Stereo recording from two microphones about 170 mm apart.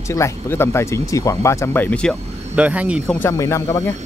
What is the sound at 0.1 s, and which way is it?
Speech, 15° left (ahead or behind).